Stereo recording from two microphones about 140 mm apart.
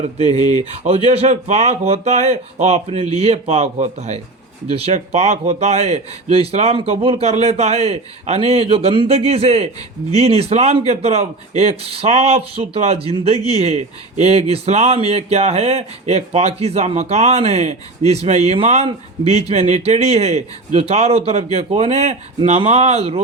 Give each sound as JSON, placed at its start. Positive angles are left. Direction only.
{"t": 0.2, "sound": "a man's voice", "side_deg": -50}